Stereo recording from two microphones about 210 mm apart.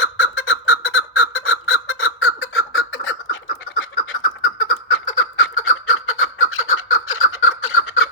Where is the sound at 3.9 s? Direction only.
40° left (ahead or behind).